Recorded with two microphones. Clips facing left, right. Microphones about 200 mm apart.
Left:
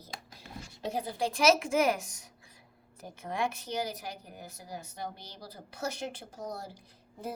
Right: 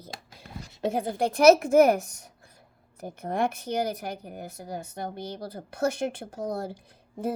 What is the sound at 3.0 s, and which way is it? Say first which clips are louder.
Speech: right 6 dB; 60° right (ahead or behind).